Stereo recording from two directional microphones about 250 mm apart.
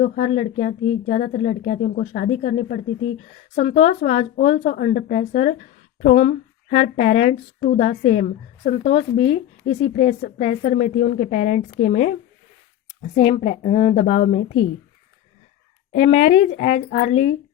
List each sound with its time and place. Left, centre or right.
0.0 s speech: left
16.1 s speech: left